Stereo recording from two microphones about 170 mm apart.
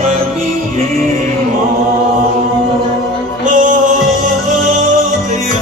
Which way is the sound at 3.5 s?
45° right (ahead or behind).